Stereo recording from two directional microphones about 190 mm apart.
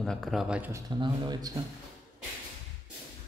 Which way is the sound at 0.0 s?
Centre (ahead or behind).